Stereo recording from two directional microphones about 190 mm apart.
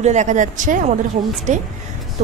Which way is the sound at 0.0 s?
40° right (ahead or behind).